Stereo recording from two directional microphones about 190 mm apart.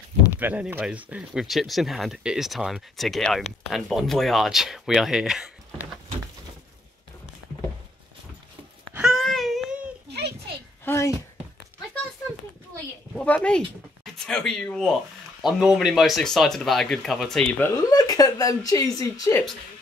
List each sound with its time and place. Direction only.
0.4 s speech: 10° right (ahead or behind)
8.9 s a sound: centre (ahead or behind)
10.0 s a sound: 60° right (ahead or behind)
10.9 s speech: 15° left (ahead or behind)
13.1 s speech: 5° left (ahead or behind)
17.9 s speech: 20° left (ahead or behind)